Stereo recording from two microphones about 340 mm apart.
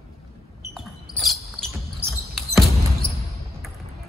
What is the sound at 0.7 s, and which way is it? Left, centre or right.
Basketball bounce, centre.